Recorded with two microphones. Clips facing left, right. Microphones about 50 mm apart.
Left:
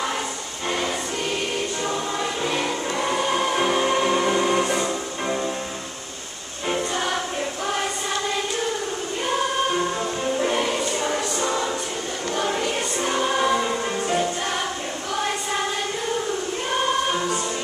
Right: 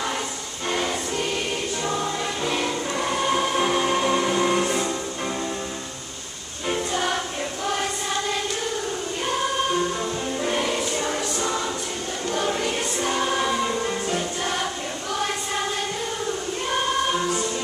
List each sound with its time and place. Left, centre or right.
0.7 s music: centre
2.4 s music: centre
6.7 s music: centre
10.4 s choir: centre
12.4 s music: centre